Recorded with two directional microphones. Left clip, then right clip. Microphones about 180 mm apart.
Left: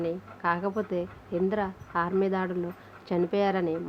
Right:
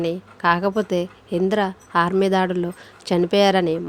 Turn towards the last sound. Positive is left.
turn(degrees=-50)  # may be behind; listen again after turning